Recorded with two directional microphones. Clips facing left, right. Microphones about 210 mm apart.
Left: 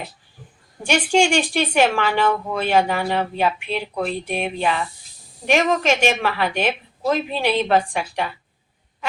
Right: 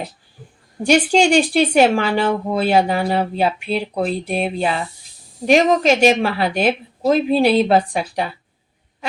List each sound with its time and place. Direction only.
0.9 s a woman's voice: 40° right (ahead or behind)